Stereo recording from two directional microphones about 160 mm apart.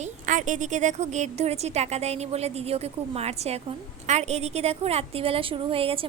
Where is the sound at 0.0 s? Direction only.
50° right (ahead or behind).